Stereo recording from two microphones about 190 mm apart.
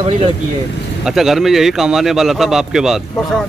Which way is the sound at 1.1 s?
Centre (ahead or behind).